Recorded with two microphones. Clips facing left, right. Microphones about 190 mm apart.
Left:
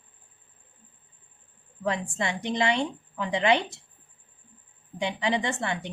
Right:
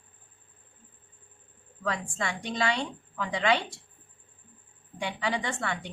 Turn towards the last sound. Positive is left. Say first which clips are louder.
# left 3 dB
turn(degrees=20)  # may be behind; listen again after turning